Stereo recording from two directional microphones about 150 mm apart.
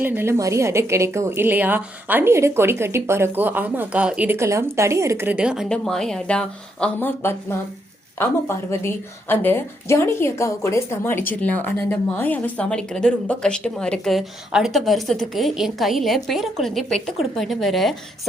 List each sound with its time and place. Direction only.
0.0 s a woman's voice: 15° right (ahead or behind)
5.6 s a woman's voice: 5° left (ahead or behind)